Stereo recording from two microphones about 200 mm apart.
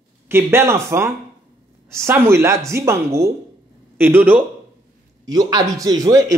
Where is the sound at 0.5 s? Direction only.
15° right (ahead or behind).